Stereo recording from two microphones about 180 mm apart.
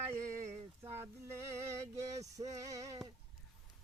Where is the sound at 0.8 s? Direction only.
15° right (ahead or behind).